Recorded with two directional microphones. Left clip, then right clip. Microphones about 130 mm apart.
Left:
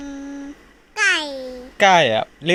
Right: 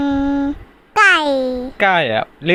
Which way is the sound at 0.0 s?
90° right.